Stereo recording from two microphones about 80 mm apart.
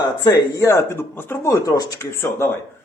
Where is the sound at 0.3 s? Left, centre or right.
Left.